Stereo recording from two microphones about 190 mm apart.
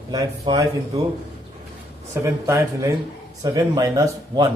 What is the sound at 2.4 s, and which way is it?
A man's voice, 15° right (ahead or behind).